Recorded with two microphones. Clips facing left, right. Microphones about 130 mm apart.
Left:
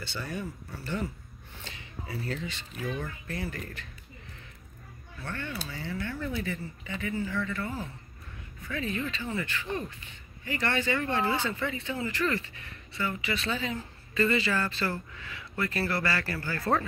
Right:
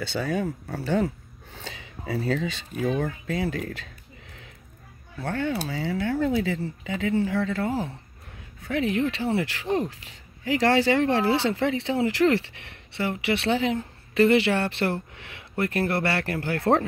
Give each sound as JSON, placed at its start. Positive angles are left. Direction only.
{"t": 0.0, "sound": "speech", "side_deg": -90}
{"t": 5.2, "sound": "speech", "side_deg": -90}
{"t": 8.6, "sound": "speech", "side_deg": -70}